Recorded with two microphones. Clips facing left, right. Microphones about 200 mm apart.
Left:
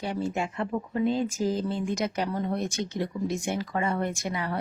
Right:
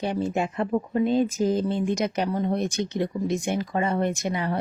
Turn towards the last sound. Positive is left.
turn(degrees=-25)  # may be behind; listen again after turning